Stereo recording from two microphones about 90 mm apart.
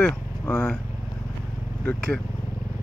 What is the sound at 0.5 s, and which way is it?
Speech, 15° left (ahead or behind).